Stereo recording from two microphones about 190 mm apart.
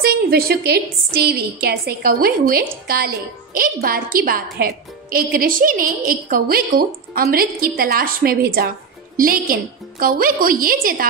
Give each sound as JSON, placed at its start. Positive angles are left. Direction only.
{"t": 0.0, "sound": "a woman's voice", "side_deg": -55}